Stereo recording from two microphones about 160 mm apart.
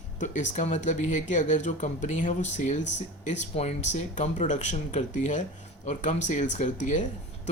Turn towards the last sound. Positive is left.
turn(degrees=50)  # may be behind; listen again after turning